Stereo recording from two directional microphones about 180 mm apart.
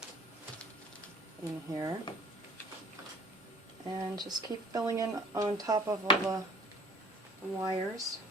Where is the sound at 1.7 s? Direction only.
20° right (ahead or behind).